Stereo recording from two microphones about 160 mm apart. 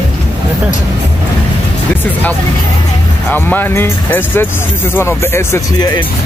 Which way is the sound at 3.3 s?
10° left (ahead or behind).